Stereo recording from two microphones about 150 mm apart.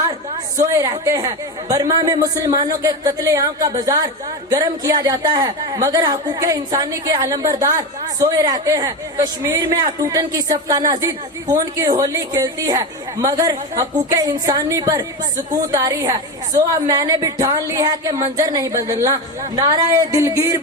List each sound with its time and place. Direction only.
0.6 s a woman's voice: 25° right (ahead or behind)